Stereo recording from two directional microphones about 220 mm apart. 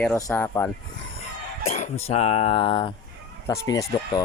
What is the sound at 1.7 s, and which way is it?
Speech, 30° left (ahead or behind).